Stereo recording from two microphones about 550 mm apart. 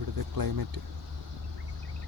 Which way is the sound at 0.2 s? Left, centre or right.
Right.